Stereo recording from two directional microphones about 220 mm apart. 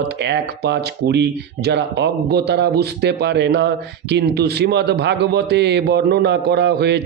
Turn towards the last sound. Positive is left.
turn(degrees=-50)  # may be behind; listen again after turning